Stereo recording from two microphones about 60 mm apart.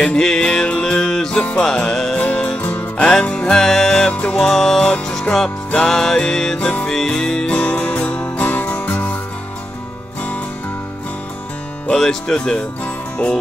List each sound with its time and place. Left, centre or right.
0.0 s music: centre
2.1 s music: centre
2.6 s music: left
3.0 s music: centre
4.1 s music: left
4.4 s music: centre
6.9 s music: centre
8.4 s music: left
11.9 s music: centre